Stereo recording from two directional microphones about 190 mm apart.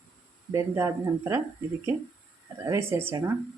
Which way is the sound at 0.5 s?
15° right (ahead or behind).